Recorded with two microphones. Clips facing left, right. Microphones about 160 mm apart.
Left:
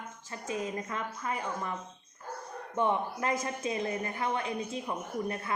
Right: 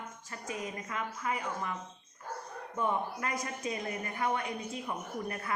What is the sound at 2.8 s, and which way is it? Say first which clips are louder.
Speech: left 3 dB; 25° left (ahead or behind).